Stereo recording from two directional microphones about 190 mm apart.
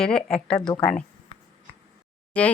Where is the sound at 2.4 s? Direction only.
5° left (ahead or behind).